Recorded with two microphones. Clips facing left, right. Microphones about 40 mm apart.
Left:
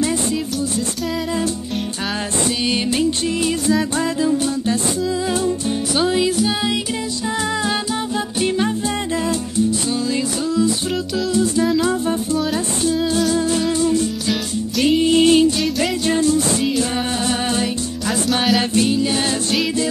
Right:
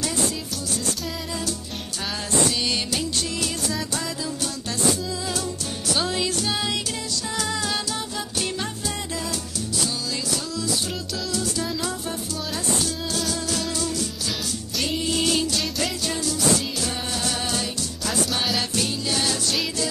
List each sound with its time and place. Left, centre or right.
2.6 s music: left
4.2 s music: left
5.9 s music: centre
8.4 s music: left
11.3 s music: left
13.3 s music: left
18.3 s music: centre
18.6 s music: left